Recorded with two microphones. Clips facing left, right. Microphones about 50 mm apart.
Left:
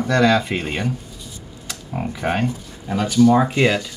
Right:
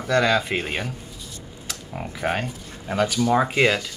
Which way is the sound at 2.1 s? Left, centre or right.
Centre.